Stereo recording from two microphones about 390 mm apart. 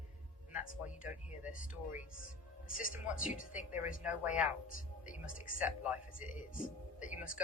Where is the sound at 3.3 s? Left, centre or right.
Centre.